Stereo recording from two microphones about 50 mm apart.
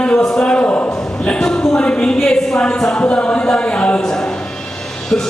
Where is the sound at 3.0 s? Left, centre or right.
Left.